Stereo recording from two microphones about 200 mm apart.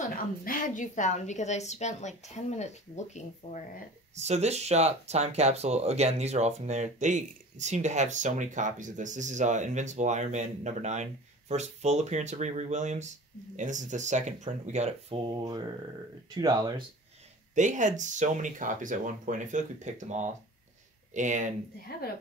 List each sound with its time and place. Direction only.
0.1 s a woman's voice: 45° left (ahead or behind)
4.1 s speech: 35° right (ahead or behind)
15.4 s speech: 20° right (ahead or behind)
17.6 s speech: 40° right (ahead or behind)